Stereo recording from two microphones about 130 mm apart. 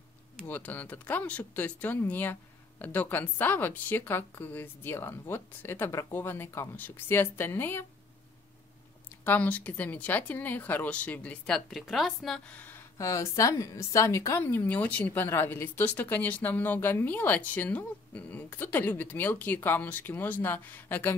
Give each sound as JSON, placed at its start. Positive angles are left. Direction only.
{"t": 0.5, "sound": "a woman's voice", "side_deg": 10}
{"t": 9.2, "sound": "a woman's voice", "side_deg": 15}
{"t": 12.4, "sound": "a woman's voice", "side_deg": 15}